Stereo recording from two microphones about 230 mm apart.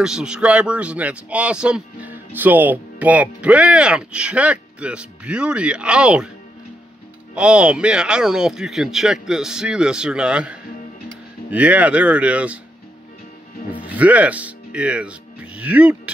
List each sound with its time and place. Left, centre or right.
0.0 s speech: centre
7.3 s speech: centre
13.7 s speech: centre